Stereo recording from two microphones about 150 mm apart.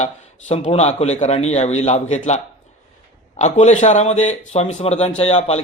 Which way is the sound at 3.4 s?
50° left (ahead or behind).